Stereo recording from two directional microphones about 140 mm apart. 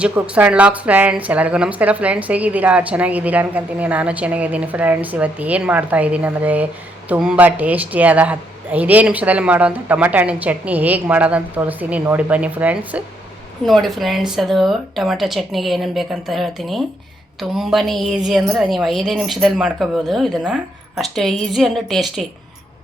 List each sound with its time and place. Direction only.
0.0 s a woman's voice: 10° right (ahead or behind)
13.7 s a woman's voice: centre (ahead or behind)